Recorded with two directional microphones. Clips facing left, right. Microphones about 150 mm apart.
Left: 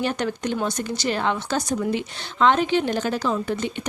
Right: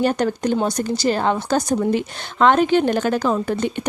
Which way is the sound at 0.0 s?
40° right (ahead or behind).